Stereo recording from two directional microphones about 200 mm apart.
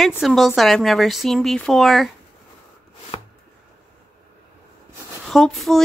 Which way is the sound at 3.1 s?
30° left (ahead or behind).